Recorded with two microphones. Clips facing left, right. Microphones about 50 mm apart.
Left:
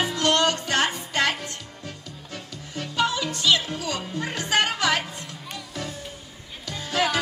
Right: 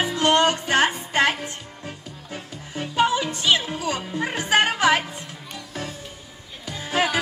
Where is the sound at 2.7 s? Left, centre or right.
Right.